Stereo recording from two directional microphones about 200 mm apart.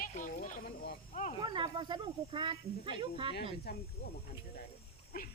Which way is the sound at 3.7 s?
55° left (ahead or behind).